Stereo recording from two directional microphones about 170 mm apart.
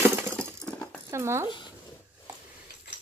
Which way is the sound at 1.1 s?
15° right (ahead or behind).